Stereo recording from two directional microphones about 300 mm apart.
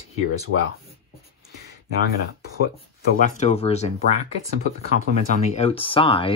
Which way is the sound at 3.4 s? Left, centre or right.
Left.